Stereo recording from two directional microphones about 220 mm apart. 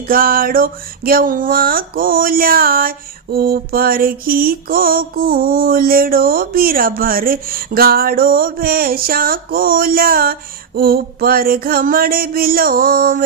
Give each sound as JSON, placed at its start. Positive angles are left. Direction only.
{"t": 0.1, "sound": "mantra", "side_deg": -40}